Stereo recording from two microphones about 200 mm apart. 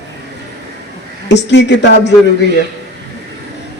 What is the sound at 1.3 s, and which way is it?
Speech, 60° left (ahead or behind).